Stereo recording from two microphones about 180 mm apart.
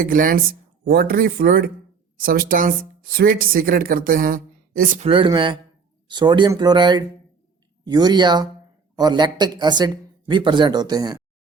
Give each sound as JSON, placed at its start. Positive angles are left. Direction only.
{"t": 0.0, "sound": "speech", "side_deg": -50}
{"t": 5.0, "sound": "speech", "side_deg": -30}